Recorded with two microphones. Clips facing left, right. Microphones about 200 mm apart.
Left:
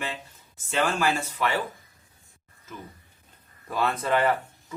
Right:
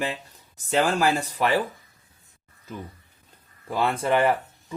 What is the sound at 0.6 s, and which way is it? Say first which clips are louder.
Speech: right 4 dB; 40° right (ahead or behind).